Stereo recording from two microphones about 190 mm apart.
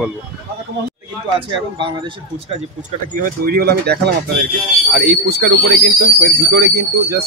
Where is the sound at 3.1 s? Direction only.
50° right (ahead or behind).